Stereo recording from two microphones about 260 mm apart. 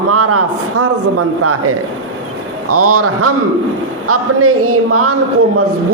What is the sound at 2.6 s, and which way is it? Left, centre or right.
A man's voice, right.